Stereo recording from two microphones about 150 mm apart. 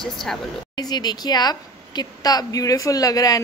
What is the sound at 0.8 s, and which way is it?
A woman's voice, 25° left (ahead or behind).